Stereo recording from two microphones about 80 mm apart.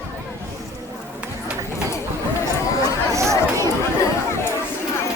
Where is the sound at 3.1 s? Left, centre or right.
Right.